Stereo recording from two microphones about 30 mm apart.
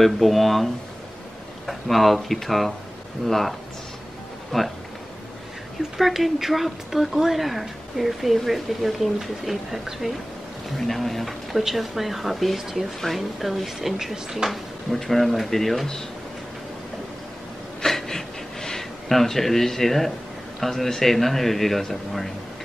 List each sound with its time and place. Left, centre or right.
0.0 s speech: centre
1.7 s a man's voice: centre
5.9 s speech: centre
10.0 s speech: centre
10.8 s a man's voice: centre
11.5 s speech: centre
13.1 s a man's voice: centre
13.4 s speech: centre
14.4 s speech: right
15.0 s a man's voice: centre
17.8 s a sound: centre
19.0 s a man's voice: centre